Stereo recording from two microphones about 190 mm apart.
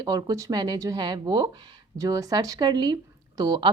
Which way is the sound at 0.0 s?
20° right (ahead or behind).